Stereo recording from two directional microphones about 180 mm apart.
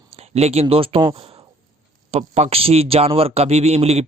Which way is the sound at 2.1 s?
35° right (ahead or behind).